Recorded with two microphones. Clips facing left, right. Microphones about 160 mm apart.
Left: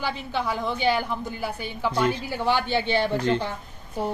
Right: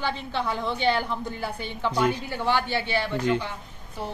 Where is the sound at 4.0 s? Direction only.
45° left (ahead or behind).